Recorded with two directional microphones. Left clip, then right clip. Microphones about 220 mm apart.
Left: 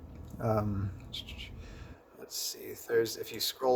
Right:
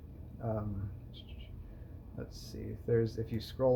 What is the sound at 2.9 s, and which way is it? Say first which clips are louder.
Speech: left 3 dB; 50° left (ahead or behind).